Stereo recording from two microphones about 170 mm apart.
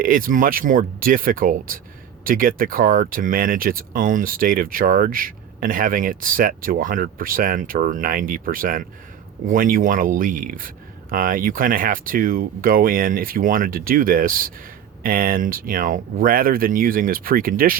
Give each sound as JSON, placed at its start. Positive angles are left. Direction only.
{"t": 0.0, "sound": "speech", "side_deg": -55}